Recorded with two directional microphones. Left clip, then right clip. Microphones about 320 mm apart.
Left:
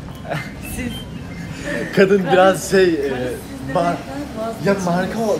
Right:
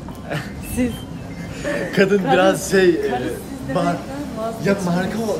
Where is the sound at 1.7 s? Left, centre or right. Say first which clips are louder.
Left 3 dB; centre.